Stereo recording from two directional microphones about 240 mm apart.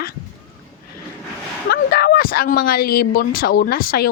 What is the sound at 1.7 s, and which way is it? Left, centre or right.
A woman's voice, left.